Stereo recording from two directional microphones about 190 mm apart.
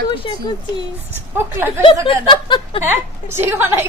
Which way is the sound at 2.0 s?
25° left (ahead or behind).